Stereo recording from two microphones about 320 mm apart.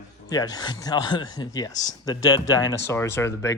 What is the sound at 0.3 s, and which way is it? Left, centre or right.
Speech, centre.